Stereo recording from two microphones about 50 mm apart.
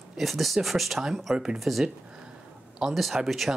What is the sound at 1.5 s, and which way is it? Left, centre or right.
Speech, centre.